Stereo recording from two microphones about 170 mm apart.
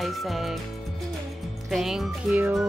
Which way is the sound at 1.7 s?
Centre (ahead or behind).